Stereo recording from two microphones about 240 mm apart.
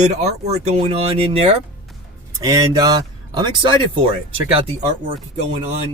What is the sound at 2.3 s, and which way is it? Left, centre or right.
Speech, centre.